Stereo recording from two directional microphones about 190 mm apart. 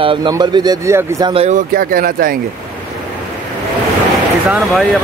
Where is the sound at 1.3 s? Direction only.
30° right (ahead or behind).